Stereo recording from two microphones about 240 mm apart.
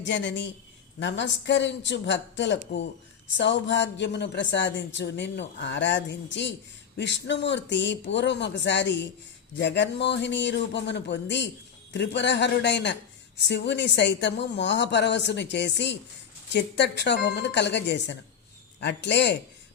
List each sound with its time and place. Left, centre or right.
0.0 s speech: left